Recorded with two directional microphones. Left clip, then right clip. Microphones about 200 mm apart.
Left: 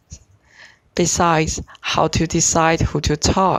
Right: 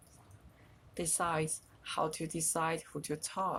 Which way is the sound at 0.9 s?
45° left (ahead or behind).